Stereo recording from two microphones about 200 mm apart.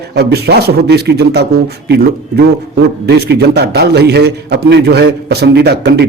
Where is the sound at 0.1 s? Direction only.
55° right (ahead or behind).